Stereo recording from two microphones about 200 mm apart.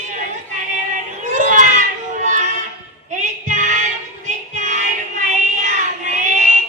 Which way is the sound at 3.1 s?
40° right (ahead or behind).